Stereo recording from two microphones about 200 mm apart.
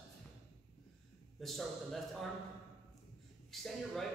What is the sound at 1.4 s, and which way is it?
Speech, centre (ahead or behind).